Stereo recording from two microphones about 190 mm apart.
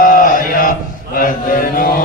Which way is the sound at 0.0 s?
45° left (ahead or behind).